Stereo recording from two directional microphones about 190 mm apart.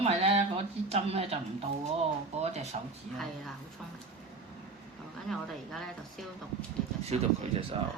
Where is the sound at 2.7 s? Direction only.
35° right (ahead or behind).